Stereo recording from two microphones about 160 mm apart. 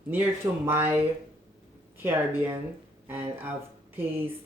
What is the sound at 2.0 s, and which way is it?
Speech, 15° right (ahead or behind).